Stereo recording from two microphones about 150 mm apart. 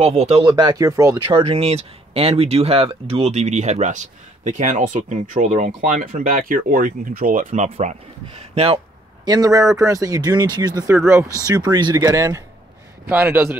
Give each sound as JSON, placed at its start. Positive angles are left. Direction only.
{"t": 0.0, "sound": "speech", "side_deg": -45}
{"t": 0.5, "sound": "speech", "side_deg": -25}
{"t": 1.2, "sound": "speech", "side_deg": -40}
{"t": 9.2, "sound": "a man's voice", "side_deg": -25}